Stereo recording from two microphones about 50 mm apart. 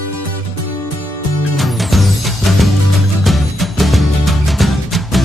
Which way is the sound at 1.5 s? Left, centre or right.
Centre.